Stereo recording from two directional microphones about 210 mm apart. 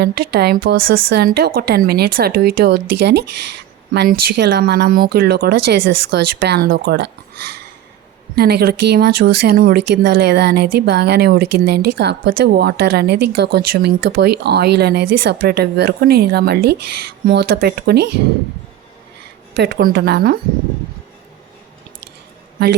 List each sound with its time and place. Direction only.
0.0 s speech: 50° right (ahead or behind)
8.4 s speech: 45° right (ahead or behind)
19.5 s speech: 50° right (ahead or behind)